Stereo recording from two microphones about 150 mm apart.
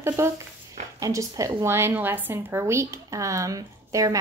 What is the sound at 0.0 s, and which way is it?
A woman's voice, 15° right (ahead or behind).